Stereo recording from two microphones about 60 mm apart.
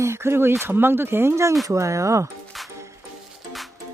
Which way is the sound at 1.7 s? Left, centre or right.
Right.